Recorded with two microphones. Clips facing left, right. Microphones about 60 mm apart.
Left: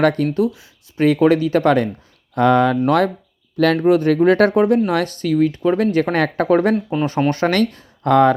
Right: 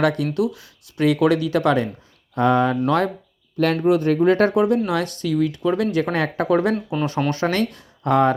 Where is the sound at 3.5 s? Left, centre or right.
Left.